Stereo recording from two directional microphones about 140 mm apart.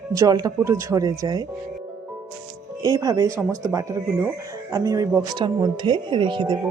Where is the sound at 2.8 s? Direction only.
25° right (ahead or behind).